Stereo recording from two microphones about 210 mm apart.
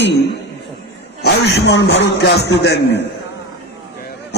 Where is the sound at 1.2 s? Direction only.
50° left (ahead or behind).